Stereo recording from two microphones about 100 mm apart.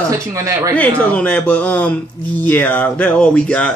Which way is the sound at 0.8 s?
15° left (ahead or behind).